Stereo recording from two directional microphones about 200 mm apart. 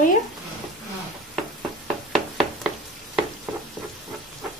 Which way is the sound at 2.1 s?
Centre (ahead or behind).